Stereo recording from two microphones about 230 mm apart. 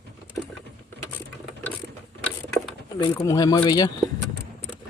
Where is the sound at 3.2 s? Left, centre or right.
Centre.